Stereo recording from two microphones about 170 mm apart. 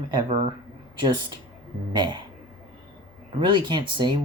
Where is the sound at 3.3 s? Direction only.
25° right (ahead or behind).